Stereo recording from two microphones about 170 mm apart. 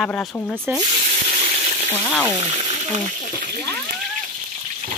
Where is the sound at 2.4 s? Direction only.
40° right (ahead or behind).